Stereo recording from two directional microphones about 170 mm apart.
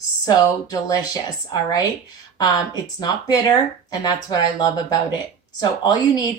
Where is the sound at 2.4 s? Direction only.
25° left (ahead or behind).